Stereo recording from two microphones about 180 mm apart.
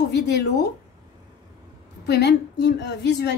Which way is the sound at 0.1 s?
70° left (ahead or behind).